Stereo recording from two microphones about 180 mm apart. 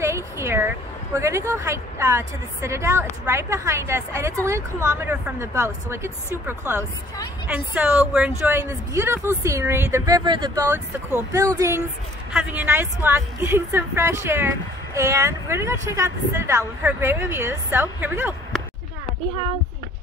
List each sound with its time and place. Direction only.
0.0 s a woman's voice: 15° right (ahead or behind)
12.3 s a woman's voice: 5° right (ahead or behind)